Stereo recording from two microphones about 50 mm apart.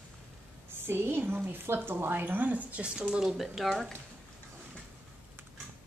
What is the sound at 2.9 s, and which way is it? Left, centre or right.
Speech, centre.